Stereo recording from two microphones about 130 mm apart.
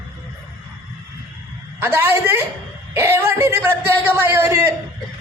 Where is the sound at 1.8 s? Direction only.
20° right (ahead or behind).